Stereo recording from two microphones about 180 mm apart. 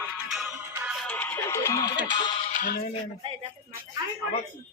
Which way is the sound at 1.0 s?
10° left (ahead or behind).